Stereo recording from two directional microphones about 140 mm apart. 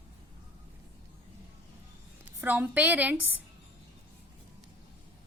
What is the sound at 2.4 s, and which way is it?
A woman's voice, 10° right (ahead or behind).